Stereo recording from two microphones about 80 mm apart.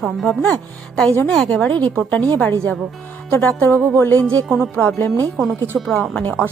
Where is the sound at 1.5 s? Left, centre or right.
Centre.